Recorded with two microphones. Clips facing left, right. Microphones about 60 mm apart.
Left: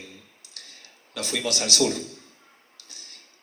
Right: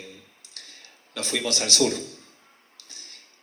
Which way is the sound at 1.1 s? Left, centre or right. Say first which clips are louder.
Even; right.